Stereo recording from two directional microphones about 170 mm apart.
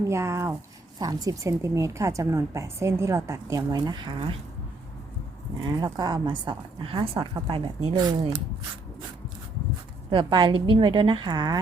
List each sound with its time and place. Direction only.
0.1 s a woman's voice: 15° right (ahead or behind)
5.6 s a woman's voice: 25° right (ahead or behind)
10.1 s a woman's voice: 30° right (ahead or behind)